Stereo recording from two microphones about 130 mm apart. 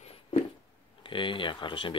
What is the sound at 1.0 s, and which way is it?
Speech, 40° left (ahead or behind).